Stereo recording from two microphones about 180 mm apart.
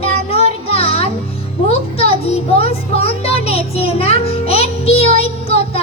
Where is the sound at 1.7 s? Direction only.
35° left (ahead or behind).